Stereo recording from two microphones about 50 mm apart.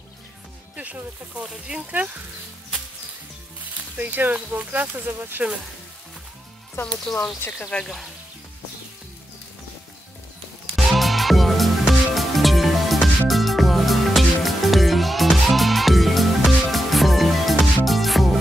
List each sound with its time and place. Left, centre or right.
0.7 s speech: right
1.4 s speech: centre
4.0 s speech: right
5.4 s speech: centre
7.1 s speech: centre
7.4 s speech: left
7.8 s speech: centre
10.8 s music: centre